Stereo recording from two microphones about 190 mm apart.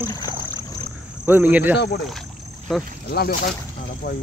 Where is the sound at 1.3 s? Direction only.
10° right (ahead or behind).